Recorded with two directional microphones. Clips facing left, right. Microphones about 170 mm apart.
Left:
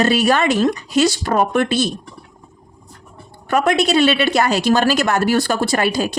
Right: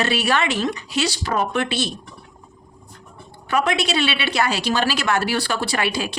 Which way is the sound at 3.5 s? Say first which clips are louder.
Left 5 dB; 45° left (ahead or behind).